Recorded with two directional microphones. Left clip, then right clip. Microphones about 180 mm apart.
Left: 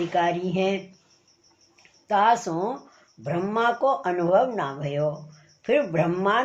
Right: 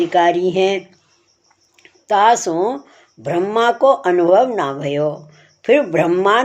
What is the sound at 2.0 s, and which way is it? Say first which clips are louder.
A woman's voice: right 7 dB; 45° right (ahead or behind).